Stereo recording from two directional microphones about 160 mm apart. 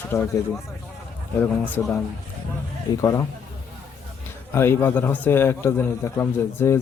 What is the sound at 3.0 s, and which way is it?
Speech, 20° left (ahead or behind).